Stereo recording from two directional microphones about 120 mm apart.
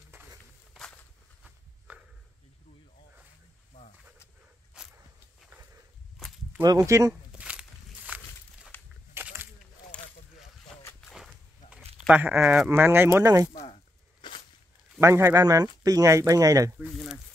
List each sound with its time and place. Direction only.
0.1 s walk: 20° right (ahead or behind)
1.9 s a sound: 15° right (ahead or behind)
4.7 s walk: 5° right (ahead or behind)
6.2 s walk: centre (ahead or behind)
6.6 s speech: 30° right (ahead or behind)
7.3 s a sound: 10° right (ahead or behind)
8.1 s walk: 10° right (ahead or behind)
8.7 s walk: 15° left (ahead or behind)
9.1 s a sound: 20° right (ahead or behind)
12.1 s speech: 15° right (ahead or behind)
12.6 s speech: 20° right (ahead or behind)
14.2 s walk: 40° left (ahead or behind)
15.0 s speech: 25° right (ahead or behind)
16.7 s a sound: 5° right (ahead or behind)